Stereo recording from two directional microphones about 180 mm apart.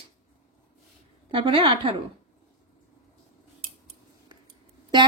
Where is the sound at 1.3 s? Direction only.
30° right (ahead or behind).